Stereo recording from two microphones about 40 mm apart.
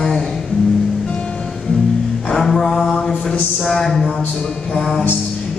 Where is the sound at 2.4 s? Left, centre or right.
Centre.